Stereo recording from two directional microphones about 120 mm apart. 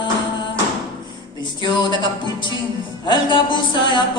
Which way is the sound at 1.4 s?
40° left (ahead or behind).